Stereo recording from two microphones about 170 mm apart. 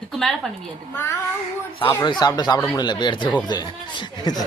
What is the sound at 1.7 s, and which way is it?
Speech, 30° left (ahead or behind).